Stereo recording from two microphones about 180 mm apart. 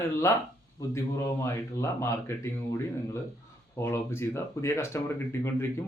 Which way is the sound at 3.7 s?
15° left (ahead or behind).